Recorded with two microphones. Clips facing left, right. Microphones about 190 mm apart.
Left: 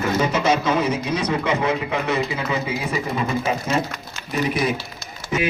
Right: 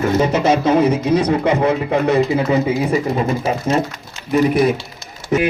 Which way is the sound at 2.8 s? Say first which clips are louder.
Right 6 dB; 35° right (ahead or behind).